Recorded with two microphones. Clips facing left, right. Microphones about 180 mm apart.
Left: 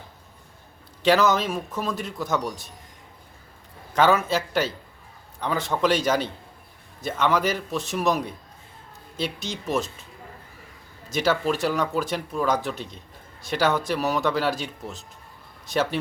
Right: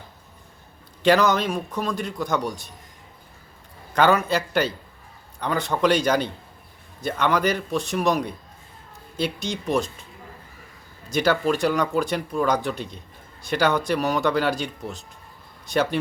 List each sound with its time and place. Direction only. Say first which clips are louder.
1.0 s speech: right 1 dB; centre (ahead or behind)
3.9 s speech: right 1 dB; centre (ahead or behind)
11.1 s speech: right 2 dB; centre (ahead or behind)